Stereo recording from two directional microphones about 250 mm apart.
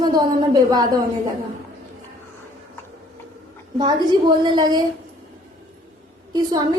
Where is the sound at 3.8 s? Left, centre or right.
Centre.